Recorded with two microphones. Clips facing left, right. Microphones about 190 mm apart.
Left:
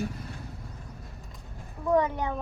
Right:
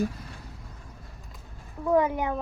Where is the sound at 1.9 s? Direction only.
10° right (ahead or behind).